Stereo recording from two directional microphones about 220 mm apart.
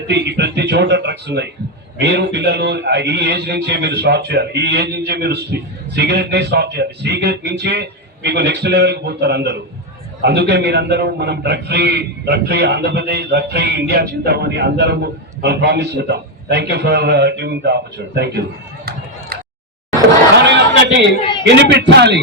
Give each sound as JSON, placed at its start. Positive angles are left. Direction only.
{"t": 0.1, "sound": "a man's voice", "side_deg": -50}
{"t": 20.3, "sound": "a sound", "side_deg": -50}
{"t": 21.4, "sound": "a man's voice", "side_deg": -50}